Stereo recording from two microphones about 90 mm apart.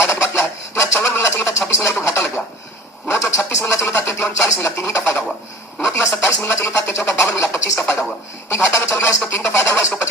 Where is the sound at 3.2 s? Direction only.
30° left (ahead or behind).